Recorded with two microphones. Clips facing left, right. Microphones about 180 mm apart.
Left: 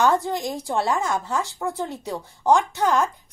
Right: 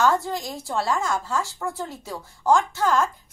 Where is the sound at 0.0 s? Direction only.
15° left (ahead or behind).